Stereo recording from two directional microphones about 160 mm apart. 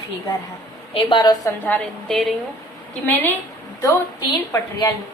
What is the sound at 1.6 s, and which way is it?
Speech, 5° left (ahead or behind).